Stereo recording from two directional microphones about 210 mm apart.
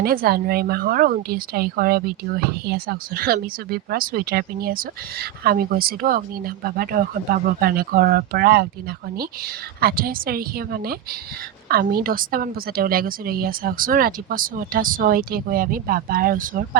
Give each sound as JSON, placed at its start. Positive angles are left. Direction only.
{"t": 0.0, "sound": "a woman's voice", "side_deg": -45}
{"t": 9.8, "sound": "a woman's voice", "side_deg": -45}